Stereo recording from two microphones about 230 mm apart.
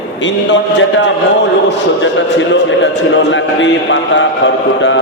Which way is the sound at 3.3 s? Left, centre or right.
Left.